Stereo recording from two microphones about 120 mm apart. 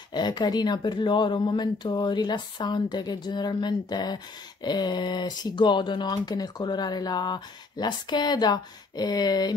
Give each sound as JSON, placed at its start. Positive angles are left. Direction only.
{"t": 0.1, "sound": "speech", "side_deg": 35}